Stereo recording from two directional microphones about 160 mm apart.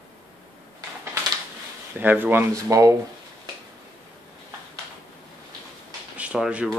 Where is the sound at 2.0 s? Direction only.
10° right (ahead or behind).